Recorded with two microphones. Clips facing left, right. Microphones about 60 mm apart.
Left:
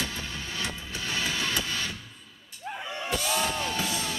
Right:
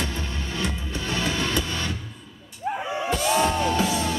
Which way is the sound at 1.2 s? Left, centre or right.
Centre.